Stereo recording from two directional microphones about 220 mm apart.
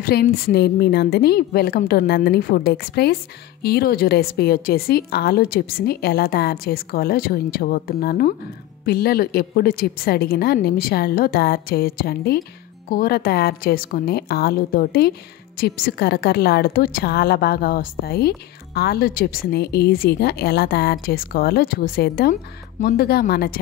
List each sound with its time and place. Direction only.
0.0 s a woman's voice: 45° left (ahead or behind)